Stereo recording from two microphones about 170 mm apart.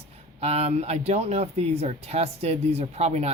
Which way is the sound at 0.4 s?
40° right (ahead or behind).